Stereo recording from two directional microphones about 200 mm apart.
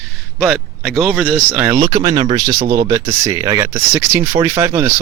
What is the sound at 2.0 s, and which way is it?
Speech, 25° right (ahead or behind).